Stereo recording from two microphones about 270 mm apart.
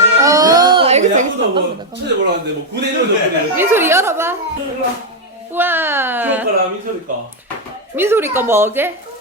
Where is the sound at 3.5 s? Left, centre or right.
Centre.